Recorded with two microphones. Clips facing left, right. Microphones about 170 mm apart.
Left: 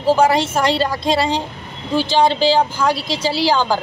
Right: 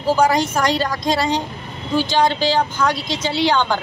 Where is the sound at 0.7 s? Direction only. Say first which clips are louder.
Left 2 dB; 30° left (ahead or behind).